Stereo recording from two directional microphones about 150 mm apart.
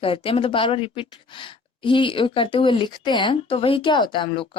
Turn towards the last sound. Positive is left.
turn(degrees=35)  # may be behind; listen again after turning